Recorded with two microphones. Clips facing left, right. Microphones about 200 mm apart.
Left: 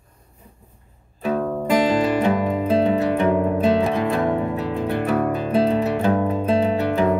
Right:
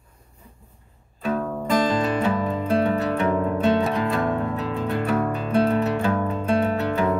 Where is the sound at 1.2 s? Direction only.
30° left (ahead or behind).